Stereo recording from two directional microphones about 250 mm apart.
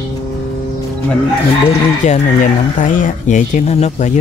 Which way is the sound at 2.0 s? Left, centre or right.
Left.